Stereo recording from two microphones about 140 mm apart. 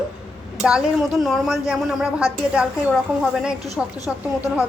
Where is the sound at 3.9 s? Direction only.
25° left (ahead or behind).